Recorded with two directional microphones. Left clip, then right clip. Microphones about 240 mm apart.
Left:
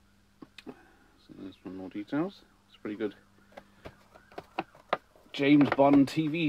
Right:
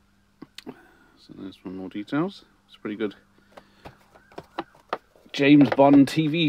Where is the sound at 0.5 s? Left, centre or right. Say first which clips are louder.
Right 6 dB; right.